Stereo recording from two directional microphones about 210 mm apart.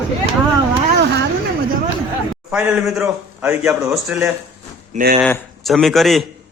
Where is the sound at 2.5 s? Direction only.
5° right (ahead or behind).